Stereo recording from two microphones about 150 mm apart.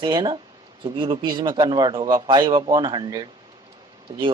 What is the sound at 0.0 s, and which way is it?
Speech, 30° right (ahead or behind).